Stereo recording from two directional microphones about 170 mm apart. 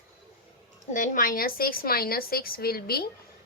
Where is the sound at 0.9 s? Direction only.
50° left (ahead or behind).